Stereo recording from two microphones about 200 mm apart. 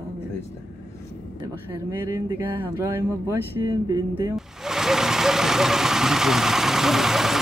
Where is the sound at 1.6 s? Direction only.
10° right (ahead or behind).